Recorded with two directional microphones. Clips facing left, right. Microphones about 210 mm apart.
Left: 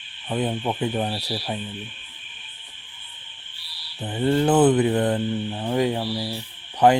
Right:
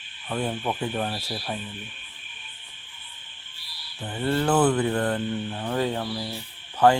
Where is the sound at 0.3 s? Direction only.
15° left (ahead or behind).